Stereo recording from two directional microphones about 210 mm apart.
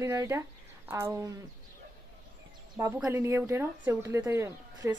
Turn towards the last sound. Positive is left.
turn(degrees=-15)  # may be behind; listen again after turning